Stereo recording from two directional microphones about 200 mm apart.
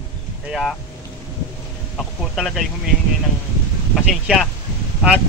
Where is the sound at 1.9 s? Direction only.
Centre (ahead or behind).